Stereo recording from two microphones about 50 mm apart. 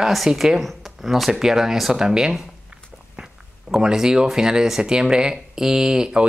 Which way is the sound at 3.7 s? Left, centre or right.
Centre.